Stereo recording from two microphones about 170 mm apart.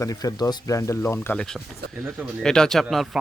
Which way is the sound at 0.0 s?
20° left (ahead or behind).